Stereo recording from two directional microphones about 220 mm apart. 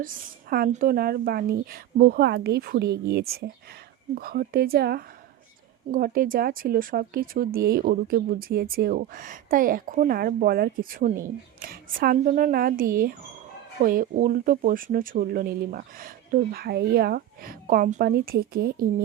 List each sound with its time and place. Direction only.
0.5 s speech: 40° right (ahead or behind)